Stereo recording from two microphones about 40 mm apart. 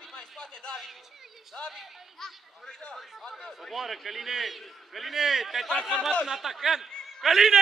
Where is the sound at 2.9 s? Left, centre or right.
Centre.